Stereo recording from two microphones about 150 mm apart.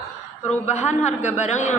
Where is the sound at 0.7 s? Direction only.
50° left (ahead or behind).